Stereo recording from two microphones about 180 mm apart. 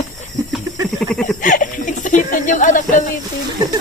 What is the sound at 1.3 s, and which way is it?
Speech, 45° left (ahead or behind).